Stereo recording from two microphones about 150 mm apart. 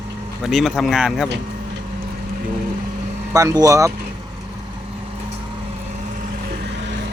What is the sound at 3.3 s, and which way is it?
Speech, 20° right (ahead or behind).